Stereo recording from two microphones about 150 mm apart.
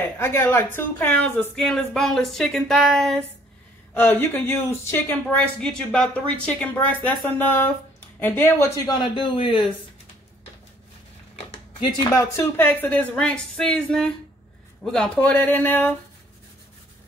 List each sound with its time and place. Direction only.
0.2 s speech: 15° left (ahead or behind)
3.9 s speech: 15° left (ahead or behind)
9.1 s speech: 35° left (ahead or behind)
11.8 s speech: 30° left (ahead or behind)
12.4 s speech: 10° left (ahead or behind)